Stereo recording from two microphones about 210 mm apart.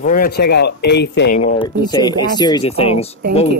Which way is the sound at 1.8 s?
20° left (ahead or behind).